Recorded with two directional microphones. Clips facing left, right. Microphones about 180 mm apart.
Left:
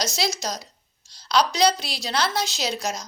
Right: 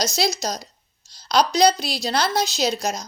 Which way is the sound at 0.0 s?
35° right (ahead or behind).